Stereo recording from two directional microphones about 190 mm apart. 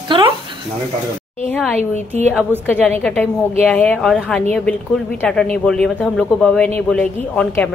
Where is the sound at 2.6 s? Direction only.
10° left (ahead or behind).